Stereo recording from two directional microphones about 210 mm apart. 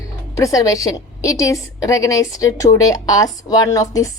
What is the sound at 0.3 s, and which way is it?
A woman's voice, 15° left (ahead or behind).